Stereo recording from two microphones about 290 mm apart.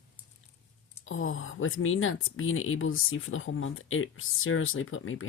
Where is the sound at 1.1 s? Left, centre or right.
Left.